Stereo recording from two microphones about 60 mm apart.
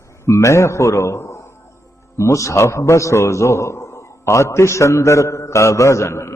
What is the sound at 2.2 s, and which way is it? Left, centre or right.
A man's voice, left.